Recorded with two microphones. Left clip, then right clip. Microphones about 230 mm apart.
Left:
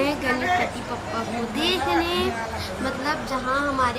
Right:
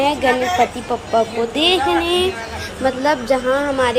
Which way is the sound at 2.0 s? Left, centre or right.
Centre.